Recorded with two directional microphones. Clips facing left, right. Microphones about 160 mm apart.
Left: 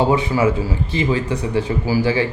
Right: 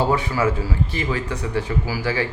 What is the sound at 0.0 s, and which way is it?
Speech, 20° left (ahead or behind).